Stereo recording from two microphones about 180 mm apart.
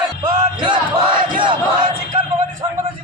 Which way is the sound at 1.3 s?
25° right (ahead or behind).